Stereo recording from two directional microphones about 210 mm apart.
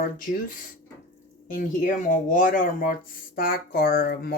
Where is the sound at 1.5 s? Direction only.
40° left (ahead or behind).